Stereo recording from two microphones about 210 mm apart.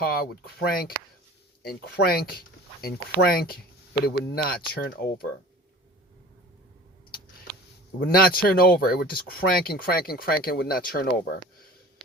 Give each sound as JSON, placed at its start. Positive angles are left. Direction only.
{"t": 0.0, "sound": "speech", "side_deg": 45}
{"t": 7.9, "sound": "speech", "side_deg": 45}